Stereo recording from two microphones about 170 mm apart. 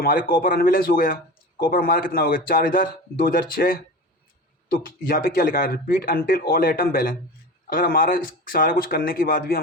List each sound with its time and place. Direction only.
0.0 s speech: 55° left (ahead or behind)